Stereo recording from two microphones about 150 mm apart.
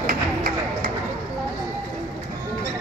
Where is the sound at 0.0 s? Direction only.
65° right (ahead or behind).